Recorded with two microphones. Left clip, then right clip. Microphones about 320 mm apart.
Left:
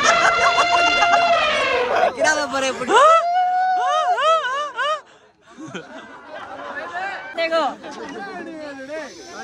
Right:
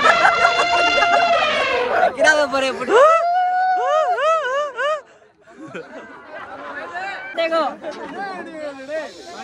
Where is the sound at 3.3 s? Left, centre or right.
Centre.